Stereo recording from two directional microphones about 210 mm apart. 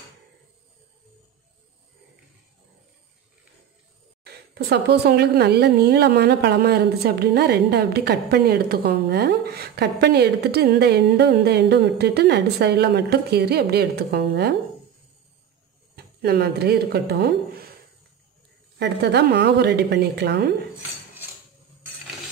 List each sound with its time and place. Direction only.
4.3 s a woman's voice: 50° right (ahead or behind)
16.0 s speech: 50° right (ahead or behind)
18.8 s a woman's voice: 50° right (ahead or behind)